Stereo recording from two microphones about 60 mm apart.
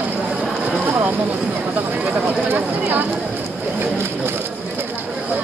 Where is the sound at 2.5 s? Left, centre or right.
Right.